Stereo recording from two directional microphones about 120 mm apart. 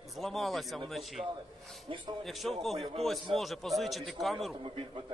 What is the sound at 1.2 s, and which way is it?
Speech, 45° right (ahead or behind).